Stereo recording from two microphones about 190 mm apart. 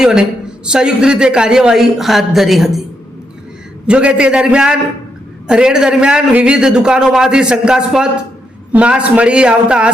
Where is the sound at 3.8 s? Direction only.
5° right (ahead or behind).